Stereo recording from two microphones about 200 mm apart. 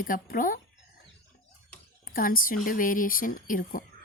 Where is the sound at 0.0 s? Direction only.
45° left (ahead or behind).